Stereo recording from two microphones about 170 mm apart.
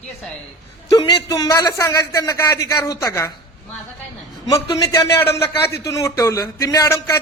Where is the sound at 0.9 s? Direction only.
30° left (ahead or behind).